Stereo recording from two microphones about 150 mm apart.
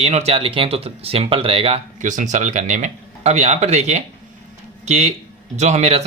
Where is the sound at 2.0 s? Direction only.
55° right (ahead or behind).